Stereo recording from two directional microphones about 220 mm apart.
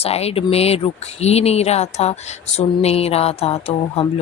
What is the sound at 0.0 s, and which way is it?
Speech, 30° left (ahead or behind).